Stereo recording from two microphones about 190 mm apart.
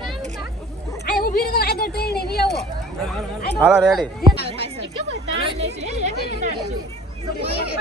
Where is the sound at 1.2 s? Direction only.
50° left (ahead or behind).